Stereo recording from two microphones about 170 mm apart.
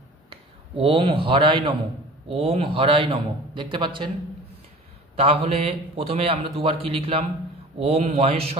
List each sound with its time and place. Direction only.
0.3 s a man's voice: 30° right (ahead or behind)
5.1 s a man's voice: 35° right (ahead or behind)